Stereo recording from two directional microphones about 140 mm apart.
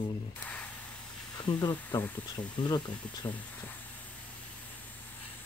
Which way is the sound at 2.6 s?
25° left (ahead or behind).